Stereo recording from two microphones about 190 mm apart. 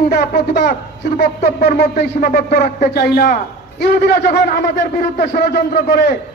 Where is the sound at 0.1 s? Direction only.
55° left (ahead or behind).